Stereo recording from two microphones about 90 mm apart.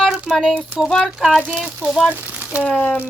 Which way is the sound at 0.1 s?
5° right (ahead or behind).